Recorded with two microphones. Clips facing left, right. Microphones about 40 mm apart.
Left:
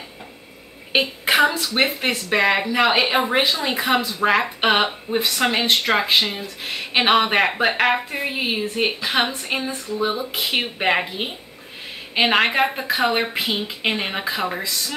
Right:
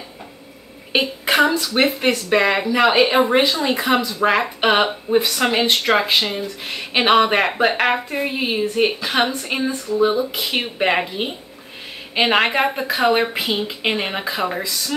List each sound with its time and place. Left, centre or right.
0.9 s a woman's voice: centre
10.3 s speech: centre
10.8 s a woman's voice: centre